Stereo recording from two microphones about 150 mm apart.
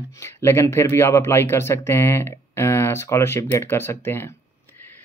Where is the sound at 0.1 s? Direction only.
20° left (ahead or behind).